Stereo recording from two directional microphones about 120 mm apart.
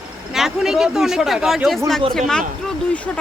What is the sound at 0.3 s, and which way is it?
Speech, 5° right (ahead or behind).